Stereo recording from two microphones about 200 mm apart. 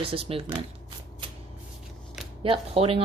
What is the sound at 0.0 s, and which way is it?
Speech, 25° right (ahead or behind).